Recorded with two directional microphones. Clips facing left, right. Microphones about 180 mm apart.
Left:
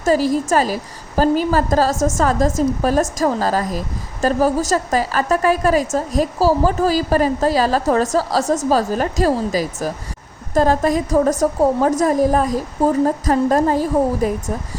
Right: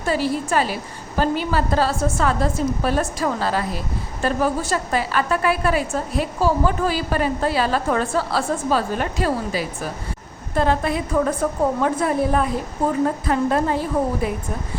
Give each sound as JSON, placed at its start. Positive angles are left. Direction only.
{"t": 0.0, "sound": "a woman's voice", "side_deg": 40}